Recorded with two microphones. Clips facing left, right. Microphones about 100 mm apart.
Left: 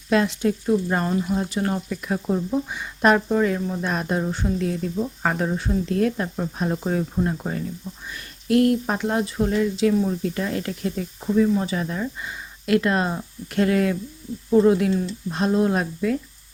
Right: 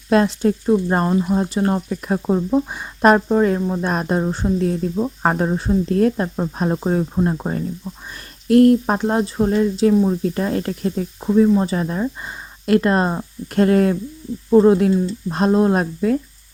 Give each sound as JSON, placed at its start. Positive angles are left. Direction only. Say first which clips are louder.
{"t": 0.1, "sound": "speech", "louder": "right 4 dB", "side_deg": -40}